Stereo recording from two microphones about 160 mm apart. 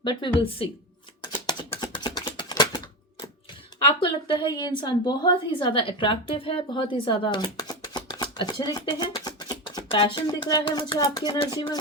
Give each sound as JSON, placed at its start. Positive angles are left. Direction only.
{"t": 0.0, "sound": "a woman's voice", "side_deg": 30}
{"t": 1.7, "sound": "typing", "side_deg": 30}
{"t": 4.0, "sound": "a woman's voice", "side_deg": 30}